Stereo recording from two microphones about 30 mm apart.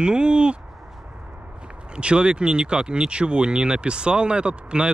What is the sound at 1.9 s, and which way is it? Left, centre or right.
Speech, right.